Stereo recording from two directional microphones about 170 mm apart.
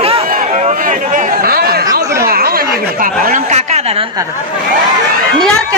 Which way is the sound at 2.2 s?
60° right (ahead or behind).